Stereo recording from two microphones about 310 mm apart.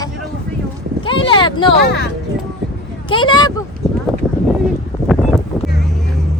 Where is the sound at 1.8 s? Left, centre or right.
Left.